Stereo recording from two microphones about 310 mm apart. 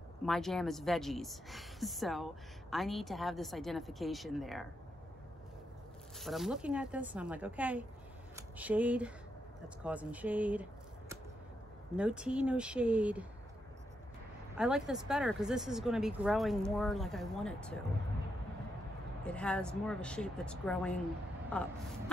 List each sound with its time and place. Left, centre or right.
0.2 s speech: centre
6.1 s speech: centre
14.6 s speech: centre
19.2 s speech: centre